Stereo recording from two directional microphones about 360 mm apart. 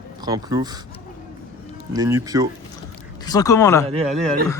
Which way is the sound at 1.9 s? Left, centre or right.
Centre.